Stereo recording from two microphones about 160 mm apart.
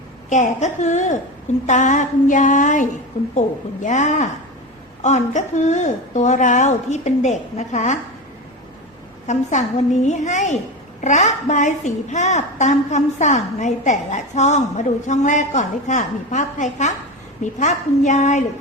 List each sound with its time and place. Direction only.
0.3 s a woman's voice: 50° left (ahead or behind)
9.2 s a woman's voice: 50° left (ahead or behind)